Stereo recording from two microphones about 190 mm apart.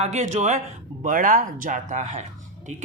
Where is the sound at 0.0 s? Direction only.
35° right (ahead or behind).